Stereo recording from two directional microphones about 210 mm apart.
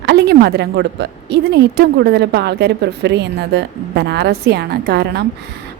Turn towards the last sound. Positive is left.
turn(degrees=-50)  # may be behind; listen again after turning